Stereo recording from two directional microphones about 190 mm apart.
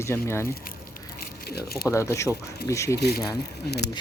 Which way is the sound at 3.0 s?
60° left (ahead or behind).